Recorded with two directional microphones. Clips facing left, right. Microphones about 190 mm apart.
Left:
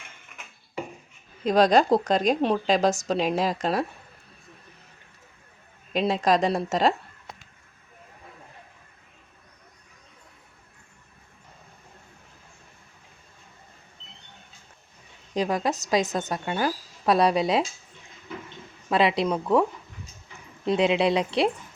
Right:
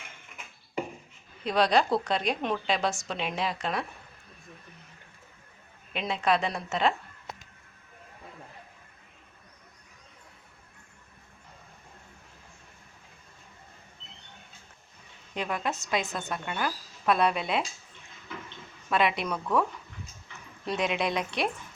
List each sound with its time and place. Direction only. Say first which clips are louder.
1.5 s a woman's voice: left 6 dB; 45° left (ahead or behind)
5.9 s a woman's voice: left 5 dB; 35° left (ahead or behind)
15.4 s a woman's voice: left 6 dB; 35° left (ahead or behind)
18.9 s a woman's voice: left 5 dB; 30° left (ahead or behind)
20.7 s a woman's voice: left 7 dB; 30° left (ahead or behind)